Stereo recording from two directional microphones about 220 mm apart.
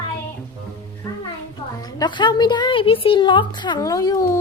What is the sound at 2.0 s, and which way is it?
A woman's voice, 20° left (ahead or behind).